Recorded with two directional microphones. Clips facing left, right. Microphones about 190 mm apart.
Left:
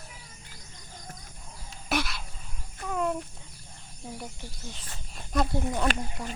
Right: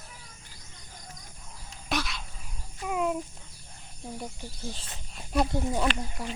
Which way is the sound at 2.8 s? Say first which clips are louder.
Right 1 dB; 10° right (ahead or behind).